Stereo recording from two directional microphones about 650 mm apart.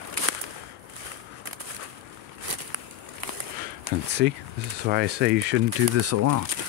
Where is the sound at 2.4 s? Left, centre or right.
Right.